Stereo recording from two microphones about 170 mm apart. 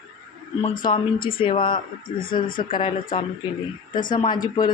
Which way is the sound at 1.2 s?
30° left (ahead or behind).